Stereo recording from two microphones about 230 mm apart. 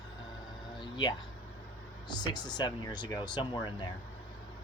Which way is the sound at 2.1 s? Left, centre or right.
Centre.